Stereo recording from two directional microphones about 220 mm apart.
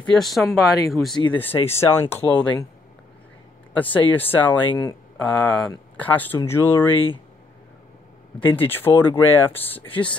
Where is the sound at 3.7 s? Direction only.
10° left (ahead or behind).